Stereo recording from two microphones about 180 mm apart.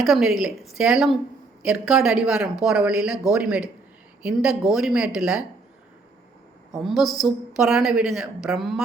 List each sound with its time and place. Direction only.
0.0 s a woman's voice: centre (ahead or behind)
6.8 s a woman's voice: centre (ahead or behind)